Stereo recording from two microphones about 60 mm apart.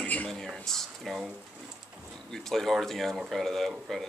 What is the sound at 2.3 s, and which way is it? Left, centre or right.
Speech, centre.